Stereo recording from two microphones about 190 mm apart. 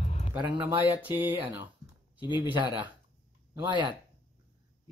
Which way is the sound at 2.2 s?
25° left (ahead or behind).